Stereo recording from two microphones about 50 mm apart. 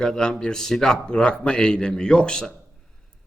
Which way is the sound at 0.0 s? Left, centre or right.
Centre.